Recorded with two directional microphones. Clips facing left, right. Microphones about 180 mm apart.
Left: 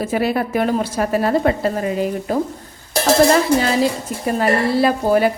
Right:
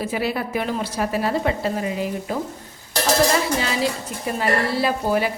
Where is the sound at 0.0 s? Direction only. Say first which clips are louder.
Left 5 dB; 50° left (ahead or behind).